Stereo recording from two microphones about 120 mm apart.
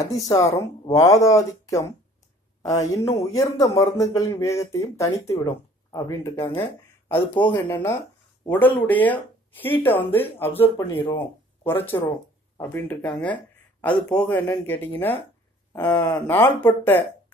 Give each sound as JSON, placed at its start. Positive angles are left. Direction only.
{"t": 0.0, "sound": "speech", "side_deg": 30}